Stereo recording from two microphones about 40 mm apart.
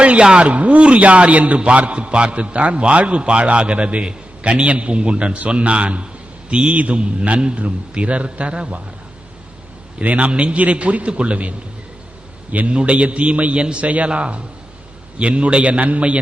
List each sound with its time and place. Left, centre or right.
0.0 s a man's voice: right
10.0 s a man's voice: right